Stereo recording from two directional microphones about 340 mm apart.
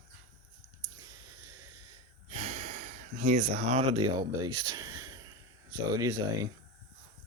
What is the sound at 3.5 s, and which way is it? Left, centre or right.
Speech, centre.